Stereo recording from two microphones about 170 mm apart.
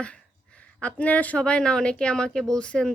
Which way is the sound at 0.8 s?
10° left (ahead or behind).